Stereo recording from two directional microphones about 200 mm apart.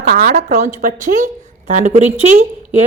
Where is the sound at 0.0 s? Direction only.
50° right (ahead or behind).